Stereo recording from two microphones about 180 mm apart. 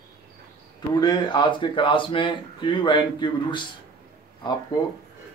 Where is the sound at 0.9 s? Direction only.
25° left (ahead or behind).